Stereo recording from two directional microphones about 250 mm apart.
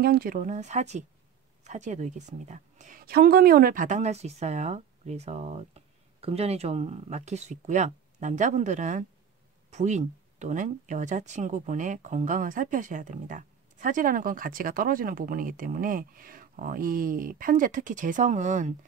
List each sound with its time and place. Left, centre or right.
0.0 s a woman's voice: right